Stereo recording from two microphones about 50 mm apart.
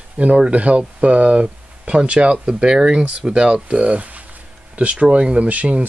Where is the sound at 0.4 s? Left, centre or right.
Right.